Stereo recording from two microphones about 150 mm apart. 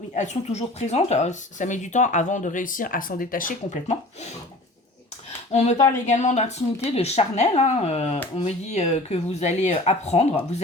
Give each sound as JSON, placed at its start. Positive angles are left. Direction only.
{"t": 0.1, "sound": "speech", "side_deg": 50}
{"t": 5.5, "sound": "speech", "side_deg": 45}
{"t": 5.7, "sound": "speech", "side_deg": 20}
{"t": 6.1, "sound": "speech", "side_deg": 50}